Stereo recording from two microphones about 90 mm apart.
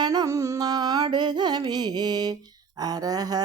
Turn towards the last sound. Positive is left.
turn(degrees=-45)  # may be behind; listen again after turning